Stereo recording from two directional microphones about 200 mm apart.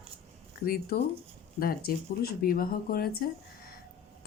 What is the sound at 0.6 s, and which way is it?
Speech, 50° left (ahead or behind).